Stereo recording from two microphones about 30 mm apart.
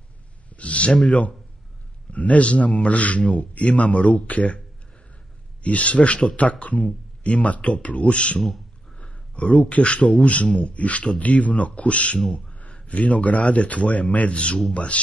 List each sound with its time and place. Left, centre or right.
0.5 s a sound: left
1.0 s a man's voice: left
5.6 s a man's voice: left